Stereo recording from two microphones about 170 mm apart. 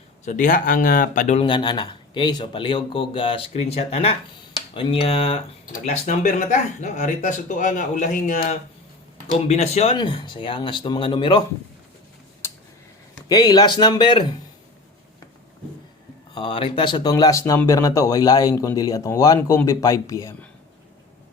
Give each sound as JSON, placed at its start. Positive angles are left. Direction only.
{"t": 0.3, "sound": "speech", "side_deg": 50}
{"t": 1.4, "sound": "speech", "side_deg": 30}
{"t": 5.7, "sound": "speech", "side_deg": 45}
{"t": 13.2, "sound": "speech", "side_deg": 20}
{"t": 16.3, "sound": "speech", "side_deg": 30}